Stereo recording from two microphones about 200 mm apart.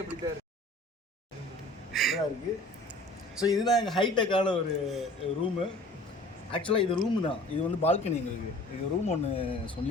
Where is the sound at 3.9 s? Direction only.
25° left (ahead or behind).